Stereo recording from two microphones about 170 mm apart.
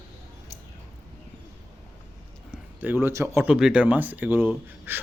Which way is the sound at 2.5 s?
10° right (ahead or behind).